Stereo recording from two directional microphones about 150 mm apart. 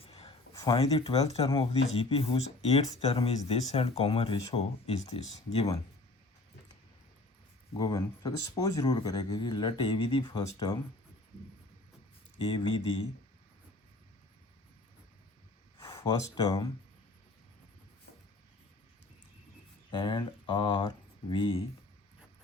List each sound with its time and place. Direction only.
0.0 s a sound: 40° left (ahead or behind)
0.5 s a sound: 25° left (ahead or behind)
0.8 s speech: 40° left (ahead or behind)
5.5 s speech: 30° left (ahead or behind)
7.8 s speech: 25° left (ahead or behind)
16.0 s speech: 25° left (ahead or behind)
19.9 s speech: 30° left (ahead or behind)